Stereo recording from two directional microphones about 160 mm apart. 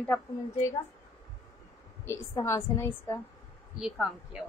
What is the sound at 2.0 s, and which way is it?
A woman's voice, 20° left (ahead or behind).